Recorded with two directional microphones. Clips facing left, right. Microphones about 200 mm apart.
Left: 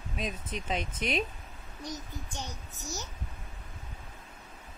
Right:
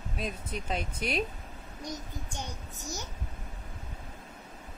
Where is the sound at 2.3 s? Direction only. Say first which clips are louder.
Right 1 dB; 10° right (ahead or behind).